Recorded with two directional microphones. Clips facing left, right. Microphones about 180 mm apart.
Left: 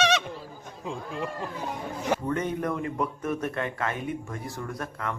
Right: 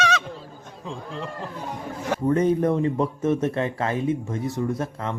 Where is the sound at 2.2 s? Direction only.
30° right (ahead or behind).